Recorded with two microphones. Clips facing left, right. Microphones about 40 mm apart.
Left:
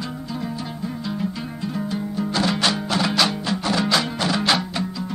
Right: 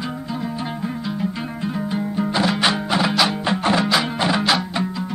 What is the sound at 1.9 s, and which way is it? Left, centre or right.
Music, right.